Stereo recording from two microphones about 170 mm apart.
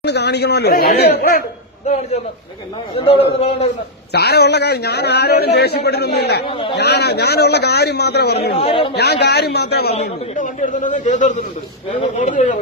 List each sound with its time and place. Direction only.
0.0 s speech: 75° left (ahead or behind)
2.9 s a man's voice: 35° left (ahead or behind)
4.1 s a man's voice: 70° left (ahead or behind)
8.6 s a man's voice: 35° left (ahead or behind)
8.9 s a man's voice: 75° left (ahead or behind)
10.3 s a man's voice: 50° left (ahead or behind)